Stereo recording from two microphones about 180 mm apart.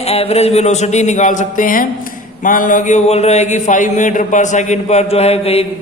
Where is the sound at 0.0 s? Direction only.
35° left (ahead or behind).